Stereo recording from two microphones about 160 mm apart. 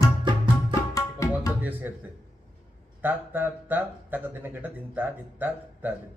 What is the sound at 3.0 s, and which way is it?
Speech, 10° right (ahead or behind).